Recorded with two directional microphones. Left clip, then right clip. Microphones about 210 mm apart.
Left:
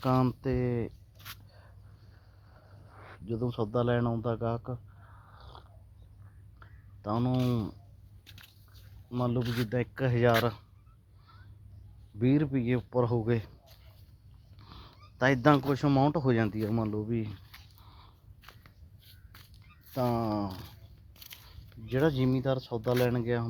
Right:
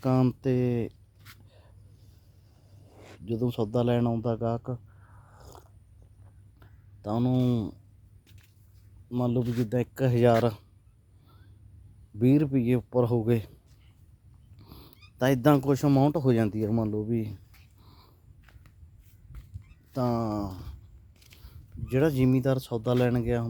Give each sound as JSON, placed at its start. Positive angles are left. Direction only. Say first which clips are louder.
{"t": 0.0, "sound": "speech", "louder": "right 2 dB", "side_deg": -35}
{"t": 1.5, "sound": "a sound", "louder": "left 1 dB", "side_deg": -30}
{"t": 2.9, "sound": "a sound", "louder": "right 3 dB", "side_deg": -35}
{"t": 8.3, "sound": "biting", "louder": "left 9 dB", "side_deg": 45}
{"t": 9.0, "sound": "speech", "louder": "right 3 dB", "side_deg": -35}
{"t": 12.2, "sound": "speech", "louder": "right 4 dB", "side_deg": -40}
{"t": 14.6, "sound": "speech", "louder": "even", "side_deg": -40}
{"t": 17.7, "sound": "a sound", "louder": "left 1 dB", "side_deg": -35}
{"t": 18.5, "sound": "a sound", "louder": "left 7 dB", "side_deg": 45}
{"t": 19.9, "sound": "speech", "louder": "right 1 dB", "side_deg": -35}
{"t": 21.2, "sound": "biting", "louder": "left 8 dB", "side_deg": 50}
{"t": 21.8, "sound": "speech", "louder": "right 3 dB", "side_deg": -40}